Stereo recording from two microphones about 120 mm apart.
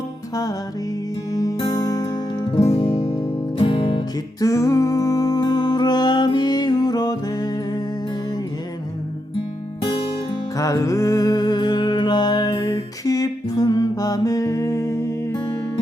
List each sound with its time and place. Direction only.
1.3 s music: 30° left (ahead or behind)
2.5 s music: 60° left (ahead or behind)
4.4 s music: 25° left (ahead or behind)
10.6 s music: 25° left (ahead or behind)